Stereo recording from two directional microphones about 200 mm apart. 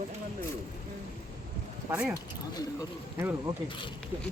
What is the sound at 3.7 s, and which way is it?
Speech, 25° left (ahead or behind).